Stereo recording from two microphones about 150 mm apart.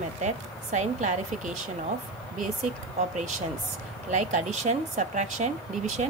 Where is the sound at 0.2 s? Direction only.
55° right (ahead or behind).